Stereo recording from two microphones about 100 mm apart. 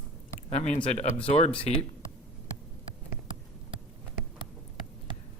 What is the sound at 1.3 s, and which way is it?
Speech, 85° left.